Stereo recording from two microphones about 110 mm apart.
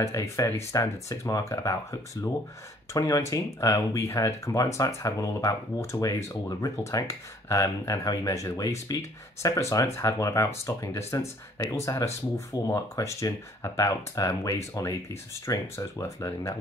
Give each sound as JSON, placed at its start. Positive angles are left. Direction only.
{"t": 0.0, "sound": "speech", "side_deg": 25}